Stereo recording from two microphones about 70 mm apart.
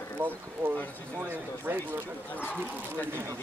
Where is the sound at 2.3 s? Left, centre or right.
Left.